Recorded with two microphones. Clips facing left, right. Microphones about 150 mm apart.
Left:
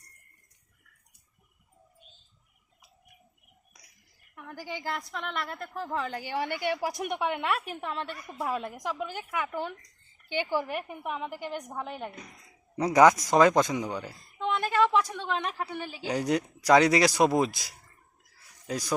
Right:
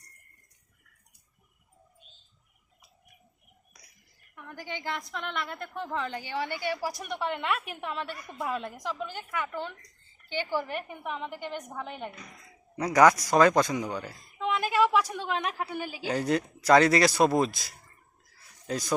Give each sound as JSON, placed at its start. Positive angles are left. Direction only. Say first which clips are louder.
{"t": 4.4, "sound": "a woman's voice", "louder": "left 1 dB", "side_deg": 5}
{"t": 6.4, "sound": "a woman's voice", "louder": "left 2 dB", "side_deg": 55}
{"t": 6.8, "sound": "a woman's voice", "louder": "left 2 dB", "side_deg": 15}
{"t": 12.7, "sound": "a man's voice", "louder": "left 1 dB", "side_deg": 25}
{"t": 14.3, "sound": "a woman's voice", "louder": "even", "side_deg": -5}
{"t": 16.0, "sound": "a man's voice", "louder": "even", "side_deg": 15}